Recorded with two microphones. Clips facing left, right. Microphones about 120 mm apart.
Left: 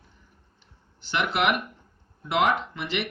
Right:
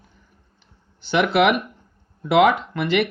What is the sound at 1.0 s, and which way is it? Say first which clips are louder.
Speech: right 8 dB; 85° right.